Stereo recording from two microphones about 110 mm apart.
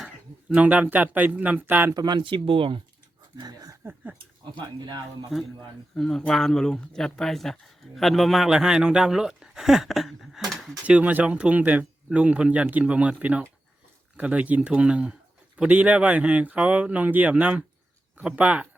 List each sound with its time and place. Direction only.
0.5 s speech: 10° right (ahead or behind)
2.0 s speech: 40° right (ahead or behind)
3.3 s speech: 35° right (ahead or behind)
6.0 s speech: 5° left (ahead or behind)
10.8 s speech: 10° right (ahead or behind)